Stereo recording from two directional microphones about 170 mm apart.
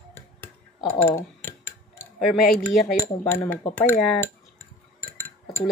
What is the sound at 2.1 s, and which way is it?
Speech, centre (ahead or behind).